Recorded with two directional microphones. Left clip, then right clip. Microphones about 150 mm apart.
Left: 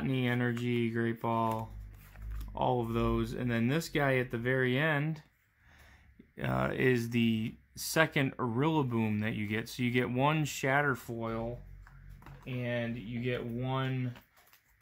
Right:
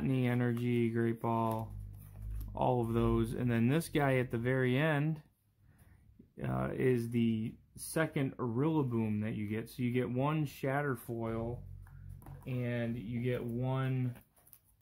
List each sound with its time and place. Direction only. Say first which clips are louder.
0.0 s speech: left 2 dB; centre (ahead or behind)
6.3 s speech: left 5 dB; 25° left (ahead or behind)
11.1 s speech: left 2 dB; centre (ahead or behind)
12.4 s speech: left 3 dB; 10° right (ahead or behind)